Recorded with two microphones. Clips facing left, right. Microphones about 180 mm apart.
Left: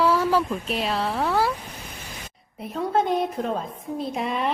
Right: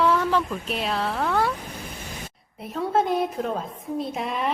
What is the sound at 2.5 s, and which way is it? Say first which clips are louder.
A woman's voice: even; centre (ahead or behind).